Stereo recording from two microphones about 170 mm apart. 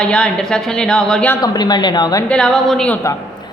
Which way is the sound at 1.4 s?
25° left (ahead or behind).